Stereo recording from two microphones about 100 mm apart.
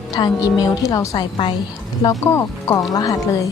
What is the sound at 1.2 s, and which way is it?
Speech, 50° left (ahead or behind).